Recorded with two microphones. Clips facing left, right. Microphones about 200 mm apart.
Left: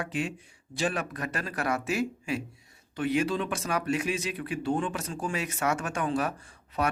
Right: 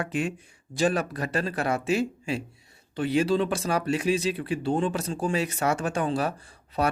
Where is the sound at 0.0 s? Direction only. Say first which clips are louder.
Right 3 dB; 50° right (ahead or behind).